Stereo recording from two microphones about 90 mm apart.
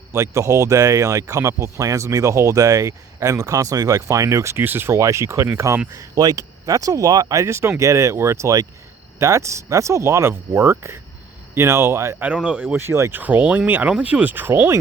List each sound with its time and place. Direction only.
0.1 s speech: 35° right (ahead or behind)
12.2 s speech: 15° right (ahead or behind)
12.7 s speech: 30° right (ahead or behind)